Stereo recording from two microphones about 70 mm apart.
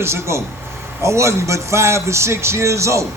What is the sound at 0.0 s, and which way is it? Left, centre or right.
A man's voice, right.